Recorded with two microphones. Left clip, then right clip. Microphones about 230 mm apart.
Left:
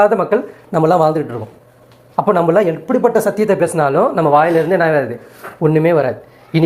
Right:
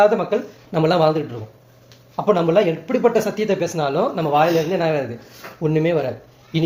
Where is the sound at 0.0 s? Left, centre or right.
Centre.